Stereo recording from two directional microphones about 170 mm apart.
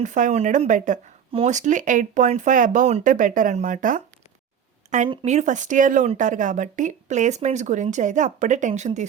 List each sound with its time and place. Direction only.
0.0 s speech: 45° right (ahead or behind)
5.2 s speech: 45° right (ahead or behind)